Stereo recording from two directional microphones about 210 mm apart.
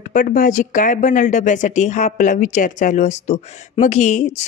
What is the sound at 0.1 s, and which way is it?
Speech, 40° left (ahead or behind).